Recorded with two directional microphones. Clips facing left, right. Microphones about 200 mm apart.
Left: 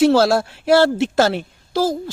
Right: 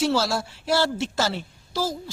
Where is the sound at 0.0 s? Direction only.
55° left (ahead or behind).